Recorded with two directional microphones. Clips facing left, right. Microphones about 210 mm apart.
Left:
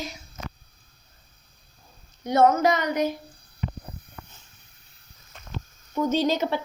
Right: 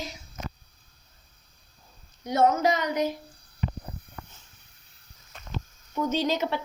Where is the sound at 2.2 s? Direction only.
60° left (ahead or behind).